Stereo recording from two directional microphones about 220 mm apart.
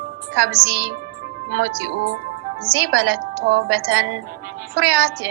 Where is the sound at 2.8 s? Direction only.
50° right (ahead or behind).